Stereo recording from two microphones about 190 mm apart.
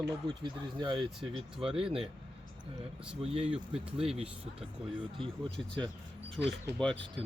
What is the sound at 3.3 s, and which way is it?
Speech, 30° right (ahead or behind).